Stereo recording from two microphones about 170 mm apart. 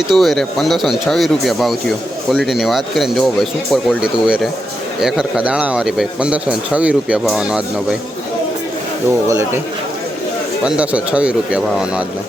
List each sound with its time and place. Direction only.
0.1 s a man's voice: centre (ahead or behind)
9.2 s speech: 15° right (ahead or behind)
10.6 s speech: 5° right (ahead or behind)